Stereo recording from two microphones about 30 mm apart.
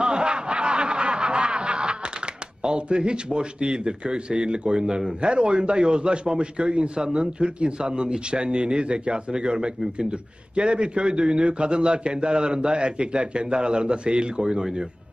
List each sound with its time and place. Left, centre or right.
0.0 s snicker: right
2.6 s a man's voice: right